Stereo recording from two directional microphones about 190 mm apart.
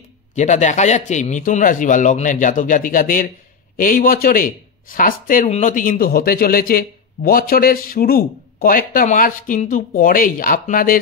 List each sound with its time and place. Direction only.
0.4 s a man's voice: 40° left (ahead or behind)